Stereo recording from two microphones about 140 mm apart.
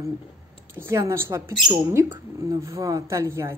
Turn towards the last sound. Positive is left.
turn(degrees=-20)  # may be behind; listen again after turning